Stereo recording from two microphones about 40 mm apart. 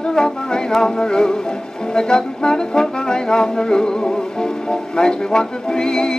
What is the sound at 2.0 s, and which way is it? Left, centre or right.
Brass instrument, centre.